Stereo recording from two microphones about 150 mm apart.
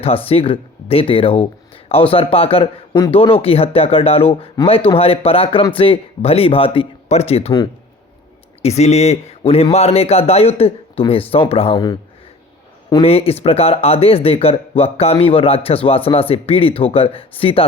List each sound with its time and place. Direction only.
0.0 s speech: 40° left (ahead or behind)
8.6 s a man's voice: 45° left (ahead or behind)
11.7 s speech: 25° left (ahead or behind)
12.9 s speech: 40° left (ahead or behind)